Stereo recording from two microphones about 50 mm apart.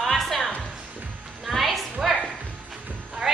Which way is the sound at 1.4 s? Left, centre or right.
Centre.